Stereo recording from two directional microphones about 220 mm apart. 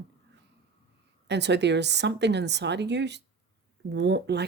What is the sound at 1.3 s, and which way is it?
Speech, 50° right (ahead or behind).